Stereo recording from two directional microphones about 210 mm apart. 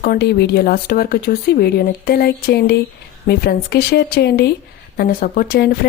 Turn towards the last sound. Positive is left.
turn(degrees=45)  # may be behind; listen again after turning